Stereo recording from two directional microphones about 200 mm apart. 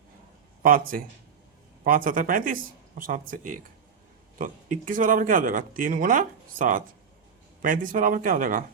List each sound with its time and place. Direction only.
0.6 s speech: 45° right (ahead or behind)